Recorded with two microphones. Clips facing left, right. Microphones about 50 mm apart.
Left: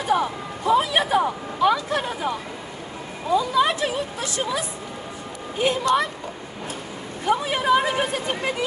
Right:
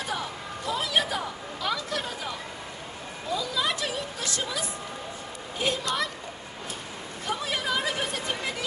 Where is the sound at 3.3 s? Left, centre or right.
Left.